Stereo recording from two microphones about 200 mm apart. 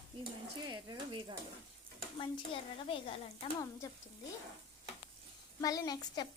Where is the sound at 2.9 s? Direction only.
25° left (ahead or behind).